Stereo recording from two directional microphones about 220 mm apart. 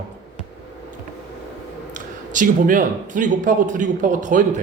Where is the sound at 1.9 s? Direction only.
35° right (ahead or behind).